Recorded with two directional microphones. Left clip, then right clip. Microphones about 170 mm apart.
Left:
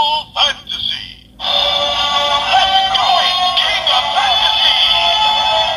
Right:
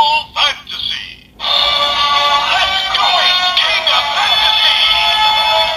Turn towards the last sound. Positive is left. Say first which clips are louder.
# right 1 dB
turn(degrees=20)  # may be behind; listen again after turning